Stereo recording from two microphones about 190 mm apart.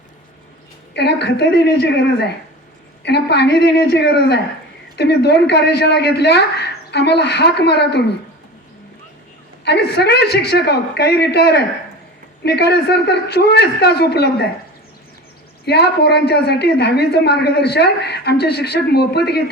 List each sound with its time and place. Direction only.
0.9 s a woman's voice: 60° left (ahead or behind)
9.6 s a woman's voice: 60° left (ahead or behind)
15.6 s a woman's voice: 60° left (ahead or behind)